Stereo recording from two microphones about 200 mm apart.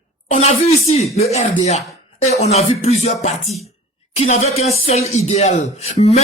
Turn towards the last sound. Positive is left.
turn(degrees=30)  # may be behind; listen again after turning